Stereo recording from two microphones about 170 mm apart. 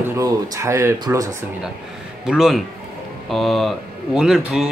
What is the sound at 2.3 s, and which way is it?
A man's voice, 5° right (ahead or behind).